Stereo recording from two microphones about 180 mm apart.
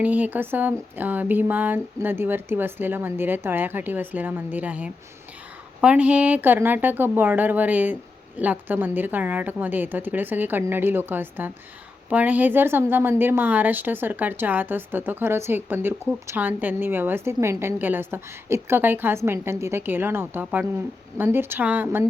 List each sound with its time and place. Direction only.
0.0 s a woman's voice: 10° right (ahead or behind)